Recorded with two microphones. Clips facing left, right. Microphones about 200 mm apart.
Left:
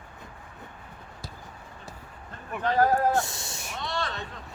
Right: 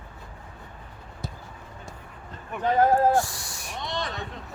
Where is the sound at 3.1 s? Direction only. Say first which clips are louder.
Right 3 dB; 20° left (ahead or behind).